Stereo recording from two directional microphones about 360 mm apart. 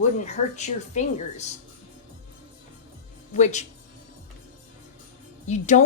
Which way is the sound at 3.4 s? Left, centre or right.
Centre.